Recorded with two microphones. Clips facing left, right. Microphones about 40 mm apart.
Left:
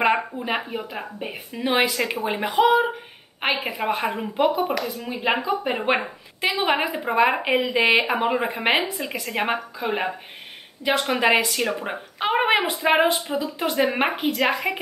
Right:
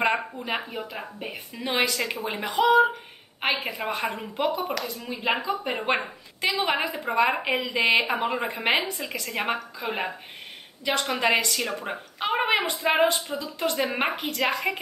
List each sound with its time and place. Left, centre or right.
0.1 s a woman's voice: centre
10.8 s speech: centre